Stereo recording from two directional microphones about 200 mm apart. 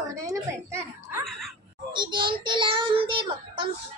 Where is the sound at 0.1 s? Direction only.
15° right (ahead or behind).